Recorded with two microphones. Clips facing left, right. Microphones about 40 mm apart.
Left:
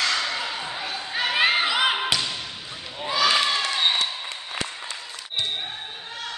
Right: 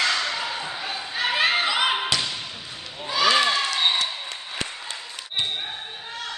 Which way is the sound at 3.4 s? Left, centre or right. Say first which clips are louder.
Right 2 dB; centre.